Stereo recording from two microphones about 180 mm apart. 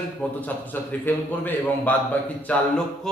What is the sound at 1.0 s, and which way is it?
A man's voice, 10° left (ahead or behind).